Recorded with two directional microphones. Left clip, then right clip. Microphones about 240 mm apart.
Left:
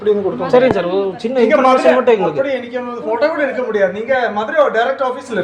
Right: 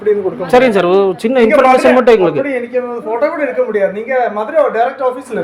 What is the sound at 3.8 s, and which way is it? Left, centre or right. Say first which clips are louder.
Speech: left 2 dB; centre.